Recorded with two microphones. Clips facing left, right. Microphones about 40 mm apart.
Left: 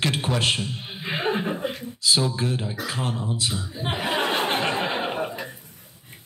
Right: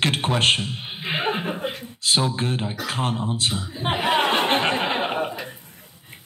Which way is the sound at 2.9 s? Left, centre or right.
Right.